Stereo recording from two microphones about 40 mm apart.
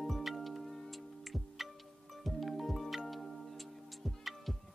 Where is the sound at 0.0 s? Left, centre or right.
Centre.